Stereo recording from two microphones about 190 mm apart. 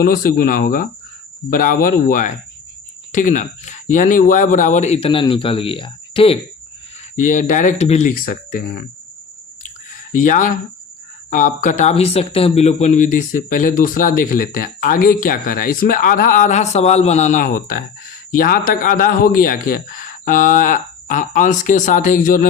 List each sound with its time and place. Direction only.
0.0 s speech: 50° left (ahead or behind); by 6.4 s 30° left (ahead or behind)
7.2 s speech: 45° left (ahead or behind)
9.9 s a sound: 45° left (ahead or behind)
11.3 s speech: 45° left (ahead or behind)